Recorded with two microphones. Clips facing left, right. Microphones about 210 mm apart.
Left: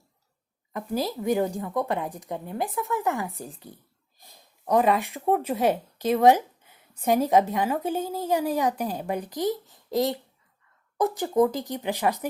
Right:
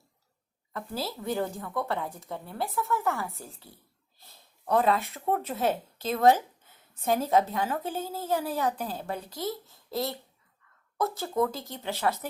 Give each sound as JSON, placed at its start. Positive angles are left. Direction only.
{"t": 0.7, "sound": "speech", "side_deg": 15}